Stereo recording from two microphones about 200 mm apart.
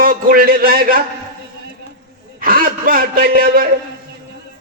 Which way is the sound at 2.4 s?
45° right (ahead or behind).